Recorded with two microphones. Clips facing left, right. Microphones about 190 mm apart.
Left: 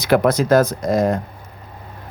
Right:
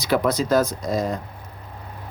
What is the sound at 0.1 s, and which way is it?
Speech, 60° left (ahead or behind).